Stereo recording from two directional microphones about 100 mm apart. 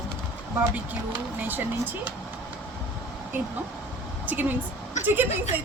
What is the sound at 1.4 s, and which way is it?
Speech, 20° right (ahead or behind).